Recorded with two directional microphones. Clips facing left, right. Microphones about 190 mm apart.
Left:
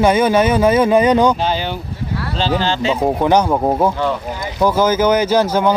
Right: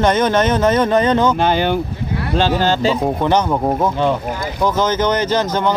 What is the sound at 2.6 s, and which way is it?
Speech, 45° right (ahead or behind).